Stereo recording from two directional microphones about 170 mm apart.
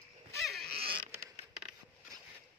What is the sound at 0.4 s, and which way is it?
Pig, centre (ahead or behind).